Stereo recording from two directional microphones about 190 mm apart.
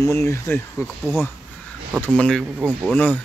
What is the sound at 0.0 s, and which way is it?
Speech, 15° left (ahead or behind).